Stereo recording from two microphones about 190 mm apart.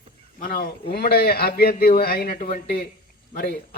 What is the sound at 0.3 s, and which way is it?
A man's voice, 55° left (ahead or behind).